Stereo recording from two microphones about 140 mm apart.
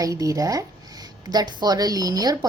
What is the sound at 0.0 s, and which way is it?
A woman's voice, 25° right (ahead or behind).